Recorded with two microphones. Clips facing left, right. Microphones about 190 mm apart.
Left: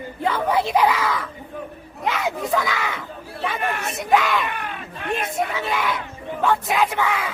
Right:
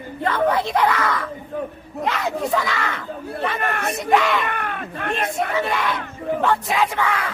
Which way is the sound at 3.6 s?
55° right (ahead or behind).